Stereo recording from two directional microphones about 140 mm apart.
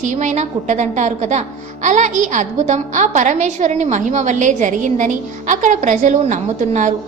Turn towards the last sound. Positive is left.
turn(degrees=-60)  # may be behind; listen again after turning